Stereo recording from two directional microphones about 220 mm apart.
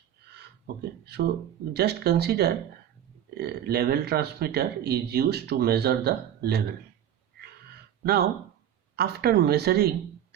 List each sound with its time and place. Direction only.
0.8 s speech: 45° right (ahead or behind)
9.0 s speech: 45° right (ahead or behind)